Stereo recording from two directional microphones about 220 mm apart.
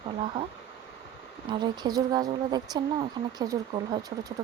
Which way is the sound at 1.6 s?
20° right (ahead or behind).